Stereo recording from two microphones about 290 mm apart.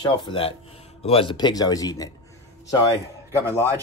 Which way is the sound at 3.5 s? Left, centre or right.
Centre.